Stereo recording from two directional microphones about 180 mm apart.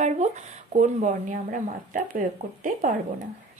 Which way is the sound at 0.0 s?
40° right (ahead or behind).